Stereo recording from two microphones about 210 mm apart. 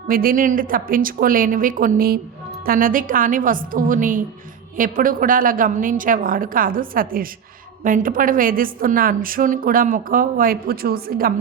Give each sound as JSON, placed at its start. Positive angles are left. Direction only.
{"t": 0.1, "sound": "a woman's voice", "side_deg": -45}